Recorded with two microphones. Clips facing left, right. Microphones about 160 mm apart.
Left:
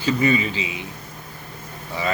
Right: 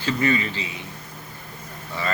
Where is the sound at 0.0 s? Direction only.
15° left (ahead or behind).